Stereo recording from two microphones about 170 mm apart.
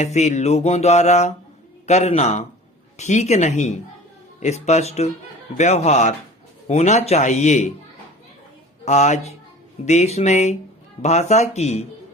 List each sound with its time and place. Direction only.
0.0 s mantra: 40° left (ahead or behind)
3.0 s speech: 40° left (ahead or behind)
4.4 s mantra: 40° left (ahead or behind)
5.5 s speech: 45° left (ahead or behind)
8.8 s speech: 40° left (ahead or behind)
9.8 s mantra: 40° left (ahead or behind)